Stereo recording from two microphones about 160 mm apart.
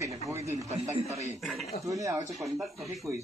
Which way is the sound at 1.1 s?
40° right (ahead or behind).